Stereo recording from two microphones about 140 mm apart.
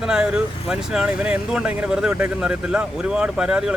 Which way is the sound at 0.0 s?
5° right (ahead or behind).